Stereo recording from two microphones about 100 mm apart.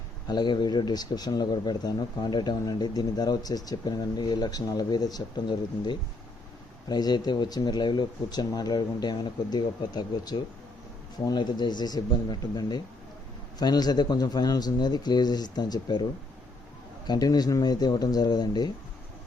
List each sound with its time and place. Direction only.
0.3 s speech: 50° left (ahead or behind)
17.1 s speech: 40° left (ahead or behind)